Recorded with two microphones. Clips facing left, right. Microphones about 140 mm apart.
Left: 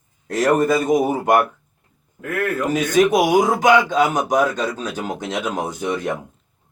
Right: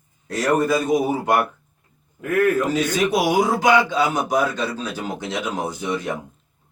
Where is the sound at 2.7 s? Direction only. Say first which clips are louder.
Left 4 dB; 45° left (ahead or behind).